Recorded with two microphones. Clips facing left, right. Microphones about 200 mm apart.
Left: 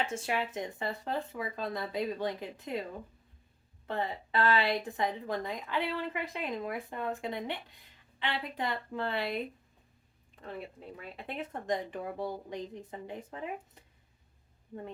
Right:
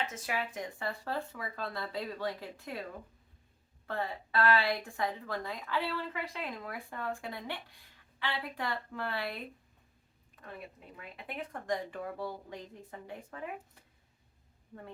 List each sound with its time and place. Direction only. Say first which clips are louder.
0.1 s a woman's voice: left 4 dB; 25° left (ahead or behind)
3.8 s a woman's voice: left 2 dB; 20° left (ahead or behind)
11.2 s a woman's voice: left 2 dB; 25° left (ahead or behind)